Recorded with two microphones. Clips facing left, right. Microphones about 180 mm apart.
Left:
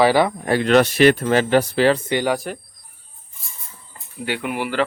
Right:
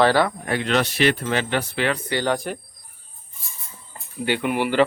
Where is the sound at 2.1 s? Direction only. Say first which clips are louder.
Left 2 dB; 15° left (ahead or behind).